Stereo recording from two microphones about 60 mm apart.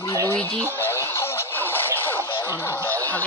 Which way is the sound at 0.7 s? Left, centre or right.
Left.